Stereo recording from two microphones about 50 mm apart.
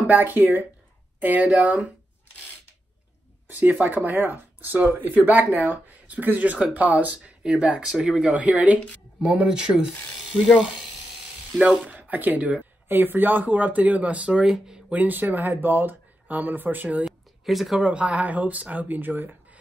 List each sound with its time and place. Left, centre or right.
0.0 s speech: right
3.4 s speech: right
7.4 s speech: centre
8.3 s speech: right
8.7 s a woman's voice: left
9.3 s speech: right
11.8 s speech: right
12.8 s speech: right
14.4 s speech: centre
14.9 s speech: right
17.0 s a sound: centre
17.8 s speech: right